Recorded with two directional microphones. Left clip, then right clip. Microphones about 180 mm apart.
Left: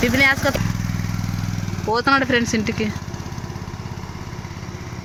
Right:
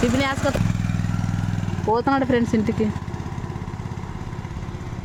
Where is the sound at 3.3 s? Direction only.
35° right (ahead or behind).